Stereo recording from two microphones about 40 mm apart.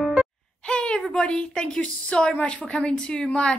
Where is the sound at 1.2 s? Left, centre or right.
Centre.